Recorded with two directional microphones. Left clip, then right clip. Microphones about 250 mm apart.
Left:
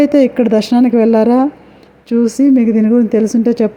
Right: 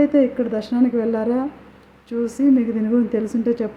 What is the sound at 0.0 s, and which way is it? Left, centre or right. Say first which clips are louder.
A woman's voice: left 7 dB; left.